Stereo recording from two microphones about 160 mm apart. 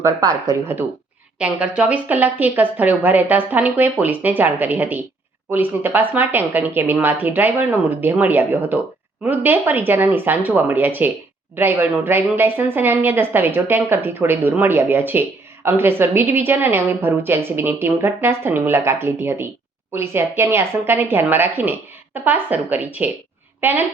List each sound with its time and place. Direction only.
0.0 s a woman's voice: 20° right (ahead or behind)